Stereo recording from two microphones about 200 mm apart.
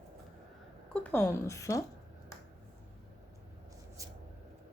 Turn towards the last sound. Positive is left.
turn(degrees=-15)  # may be behind; listen again after turning